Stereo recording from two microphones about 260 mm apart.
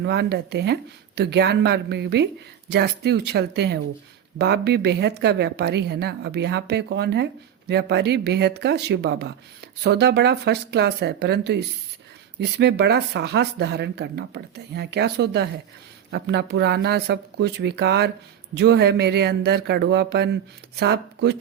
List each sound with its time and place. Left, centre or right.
0.0 s a woman's voice: right